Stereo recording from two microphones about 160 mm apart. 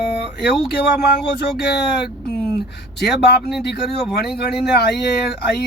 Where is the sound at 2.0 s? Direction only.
5° left (ahead or behind).